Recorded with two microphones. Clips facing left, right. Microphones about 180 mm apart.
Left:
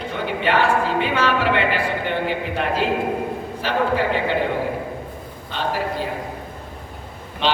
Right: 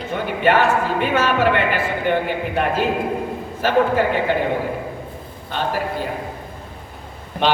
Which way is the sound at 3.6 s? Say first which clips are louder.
Right 4 dB; 50° right (ahead or behind).